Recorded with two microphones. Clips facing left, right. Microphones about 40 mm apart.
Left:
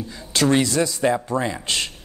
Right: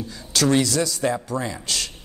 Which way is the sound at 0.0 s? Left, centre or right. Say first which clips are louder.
Left 1 dB; left.